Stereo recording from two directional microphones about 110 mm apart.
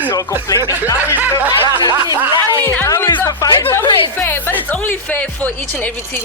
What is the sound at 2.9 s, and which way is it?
Speech, 30° left (ahead or behind).